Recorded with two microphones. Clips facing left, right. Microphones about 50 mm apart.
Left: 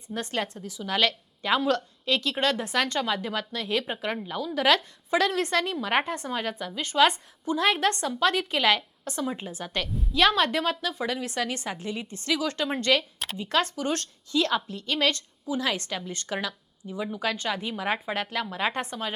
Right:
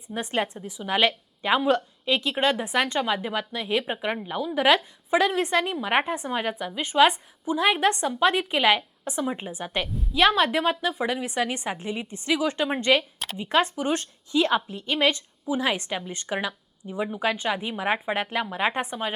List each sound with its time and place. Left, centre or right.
0.1 s a woman's voice: centre
9.9 s a woman's voice: centre
10.2 s a woman's voice: centre